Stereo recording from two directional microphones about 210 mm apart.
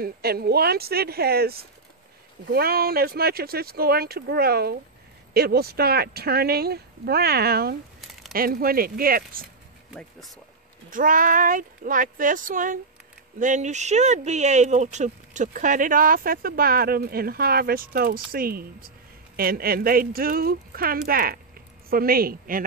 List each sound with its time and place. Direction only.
0.0 s speech: 45° right (ahead or behind)
10.9 s speech: 40° right (ahead or behind)